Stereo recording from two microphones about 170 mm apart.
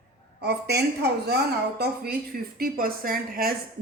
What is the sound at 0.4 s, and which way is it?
Speech, 75° right (ahead or behind).